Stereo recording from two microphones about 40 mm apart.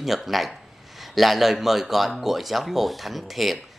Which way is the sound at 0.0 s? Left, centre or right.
Centre.